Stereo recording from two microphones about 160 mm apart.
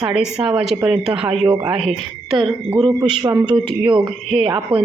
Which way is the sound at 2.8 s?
25° right (ahead or behind).